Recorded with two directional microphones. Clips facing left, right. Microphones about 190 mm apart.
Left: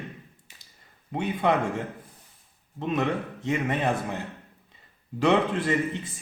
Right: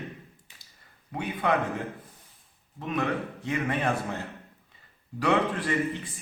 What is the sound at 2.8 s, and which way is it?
A man's voice, 25° left (ahead or behind).